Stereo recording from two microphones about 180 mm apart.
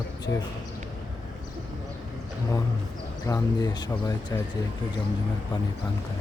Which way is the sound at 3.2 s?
20° left (ahead or behind).